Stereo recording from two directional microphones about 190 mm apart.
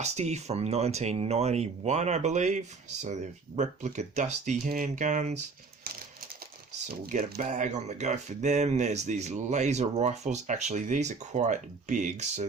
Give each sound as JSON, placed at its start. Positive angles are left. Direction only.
{"t": 0.0, "sound": "speech", "side_deg": -35}
{"t": 6.8, "sound": "speech", "side_deg": -40}